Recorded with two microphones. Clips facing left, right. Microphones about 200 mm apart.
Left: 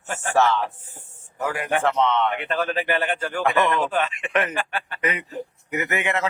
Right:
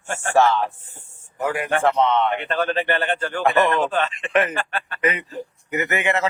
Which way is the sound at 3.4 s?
25° right (ahead or behind).